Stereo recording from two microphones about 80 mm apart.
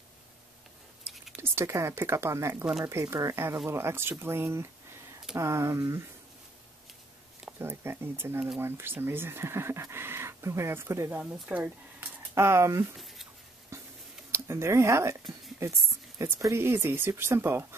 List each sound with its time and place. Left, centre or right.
1.4 s speech: right
7.5 s speech: right
11.1 s speech: centre
11.4 s a sound: right
12.4 s speech: right
12.9 s a sound: centre
13.7 s a sound: right
14.3 s speech: right
16.2 s speech: right